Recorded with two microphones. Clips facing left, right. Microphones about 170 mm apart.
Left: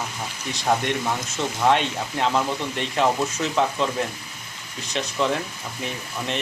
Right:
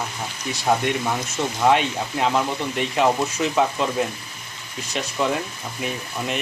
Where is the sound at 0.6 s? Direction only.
5° right (ahead or behind).